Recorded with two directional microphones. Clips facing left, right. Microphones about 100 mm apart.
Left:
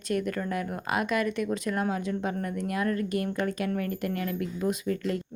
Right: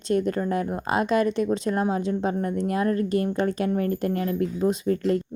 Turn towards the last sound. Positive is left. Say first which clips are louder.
# right 6 dB
turn(degrees=-35)  # may be behind; listen again after turning